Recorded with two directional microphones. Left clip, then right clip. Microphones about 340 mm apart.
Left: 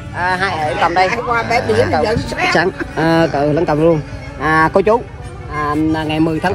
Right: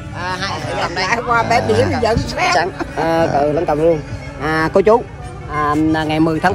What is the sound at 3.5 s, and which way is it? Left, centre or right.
Speech, left.